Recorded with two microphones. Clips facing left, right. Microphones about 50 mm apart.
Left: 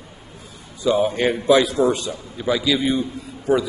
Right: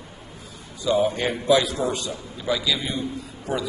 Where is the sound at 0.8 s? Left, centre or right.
Left.